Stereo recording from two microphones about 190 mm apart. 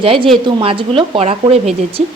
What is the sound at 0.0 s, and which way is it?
A woman's voice, 30° right (ahead or behind).